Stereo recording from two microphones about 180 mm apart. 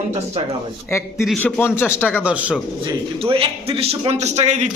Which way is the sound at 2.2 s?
5° right (ahead or behind).